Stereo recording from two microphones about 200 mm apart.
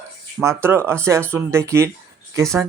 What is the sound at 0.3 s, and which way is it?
Speech, 10° right (ahead or behind).